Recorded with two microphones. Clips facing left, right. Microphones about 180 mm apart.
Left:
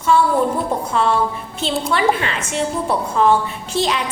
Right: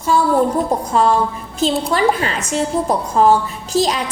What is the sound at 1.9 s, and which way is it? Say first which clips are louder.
A woman's voice: right 2 dB; 40° right (ahead or behind).